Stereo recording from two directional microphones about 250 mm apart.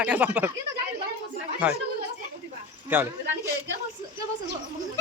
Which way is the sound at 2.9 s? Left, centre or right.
Centre.